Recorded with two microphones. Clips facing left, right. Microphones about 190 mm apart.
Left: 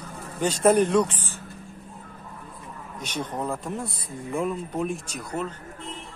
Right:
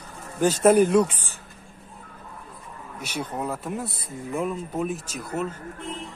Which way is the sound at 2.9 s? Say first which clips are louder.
Even; 10° right (ahead or behind).